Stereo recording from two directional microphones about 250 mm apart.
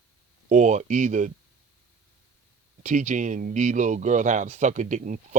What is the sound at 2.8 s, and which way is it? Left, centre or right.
Speech, right.